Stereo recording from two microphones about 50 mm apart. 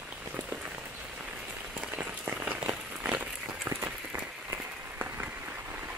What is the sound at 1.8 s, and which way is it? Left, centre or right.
Rain on surface, right.